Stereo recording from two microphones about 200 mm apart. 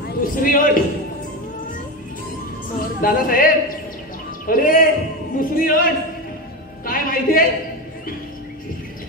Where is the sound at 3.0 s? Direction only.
45° left (ahead or behind).